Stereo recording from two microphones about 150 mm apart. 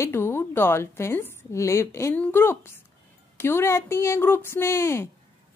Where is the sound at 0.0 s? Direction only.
15° left (ahead or behind).